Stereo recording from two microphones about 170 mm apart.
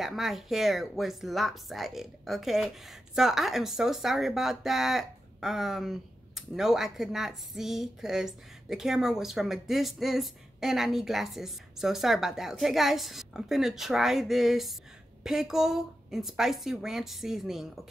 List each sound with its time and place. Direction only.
0.0 s speech: centre (ahead or behind)